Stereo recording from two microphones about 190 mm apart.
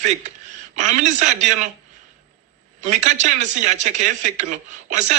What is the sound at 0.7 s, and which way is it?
Speech, 40° right (ahead or behind).